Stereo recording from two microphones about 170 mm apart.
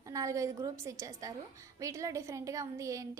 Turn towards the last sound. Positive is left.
turn(degrees=-20)  # may be behind; listen again after turning